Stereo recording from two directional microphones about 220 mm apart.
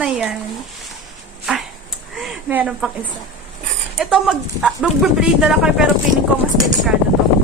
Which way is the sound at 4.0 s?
5° right (ahead or behind).